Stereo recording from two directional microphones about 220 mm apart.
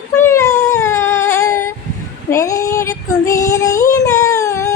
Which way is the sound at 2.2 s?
15° left (ahead or behind).